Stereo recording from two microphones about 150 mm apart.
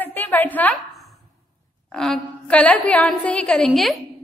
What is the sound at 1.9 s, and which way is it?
A woman's voice, 5° left (ahead or behind).